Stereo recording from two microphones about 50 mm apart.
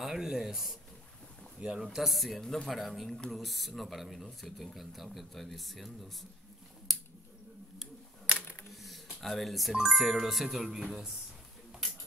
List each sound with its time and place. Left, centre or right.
0.0 s speech: centre
1.9 s speech: centre
6.9 s a sound: centre
8.8 s speech: centre